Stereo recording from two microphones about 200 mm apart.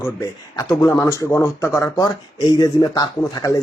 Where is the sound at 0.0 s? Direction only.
15° left (ahead or behind).